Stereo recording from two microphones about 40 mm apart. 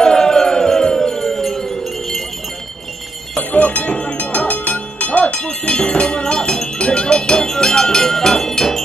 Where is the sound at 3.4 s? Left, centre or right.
Left.